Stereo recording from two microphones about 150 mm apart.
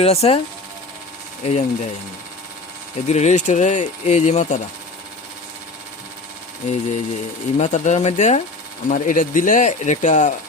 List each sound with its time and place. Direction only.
0.0 s speech: 40° left (ahead or behind)
1.5 s speech: 50° left (ahead or behind)
3.1 s speech: 50° left (ahead or behind)
6.7 s speech: 50° left (ahead or behind)
8.9 s speech: 60° left (ahead or behind)